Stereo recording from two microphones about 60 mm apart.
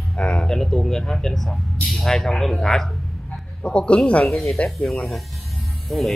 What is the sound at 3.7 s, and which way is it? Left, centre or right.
Speech, centre.